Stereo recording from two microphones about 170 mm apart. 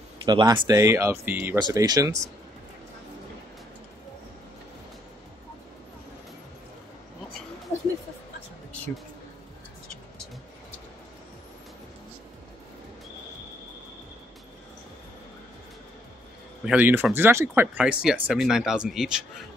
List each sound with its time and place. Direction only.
0.2 s speech: 25° right (ahead or behind)
1.6 s speech: 25° right (ahead or behind)
16.6 s speech: 10° right (ahead or behind)